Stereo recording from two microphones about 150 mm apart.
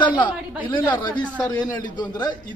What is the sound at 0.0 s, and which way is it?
Speech, 30° left (ahead or behind).